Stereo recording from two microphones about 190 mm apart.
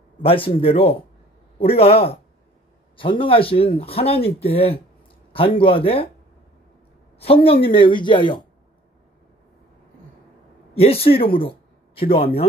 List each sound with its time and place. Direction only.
0.2 s a man's voice: 30° left (ahead or behind)
7.6 s speech: 25° left (ahead or behind)
10.7 s speech: 30° left (ahead or behind)
11.3 s a sound: 30° left (ahead or behind)